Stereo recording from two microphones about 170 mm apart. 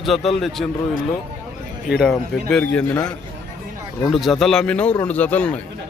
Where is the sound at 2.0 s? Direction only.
Centre (ahead or behind).